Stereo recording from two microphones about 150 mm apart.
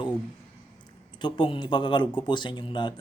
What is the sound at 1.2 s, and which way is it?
Speech, 35° left (ahead or behind).